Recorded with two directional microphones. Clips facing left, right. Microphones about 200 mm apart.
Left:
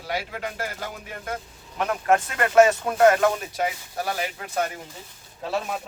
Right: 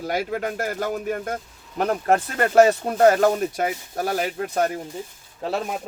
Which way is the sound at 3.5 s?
50° right (ahead or behind).